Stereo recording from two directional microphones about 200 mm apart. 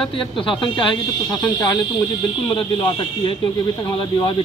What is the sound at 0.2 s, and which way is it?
Speech, 25° left (ahead or behind).